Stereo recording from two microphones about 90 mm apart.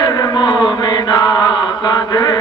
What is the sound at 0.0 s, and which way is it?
Chant, 45° left (ahead or behind).